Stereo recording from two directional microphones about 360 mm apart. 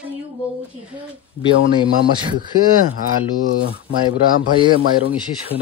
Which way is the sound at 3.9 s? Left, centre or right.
Centre.